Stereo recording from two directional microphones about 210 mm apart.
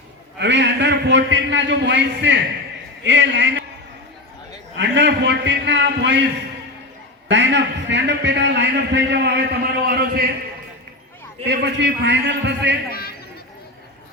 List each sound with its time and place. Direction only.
0.3 s a man's voice: 55° right (ahead or behind)
4.8 s a man's voice: 55° right (ahead or behind)
7.3 s a man's voice: 60° right (ahead or behind)
11.4 s a man's voice: 55° right (ahead or behind)
12.9 s a sound: 45° left (ahead or behind)